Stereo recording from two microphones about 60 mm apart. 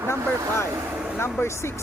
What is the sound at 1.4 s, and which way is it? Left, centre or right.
Speech, left.